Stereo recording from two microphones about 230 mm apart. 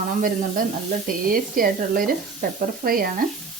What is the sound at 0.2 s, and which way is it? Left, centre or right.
Speech, right.